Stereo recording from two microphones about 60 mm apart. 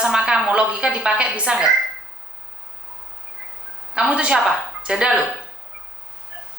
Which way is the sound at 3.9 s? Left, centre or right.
Centre.